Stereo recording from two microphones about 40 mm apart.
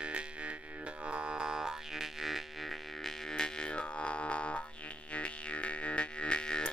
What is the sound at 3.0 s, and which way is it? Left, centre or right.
Music, centre.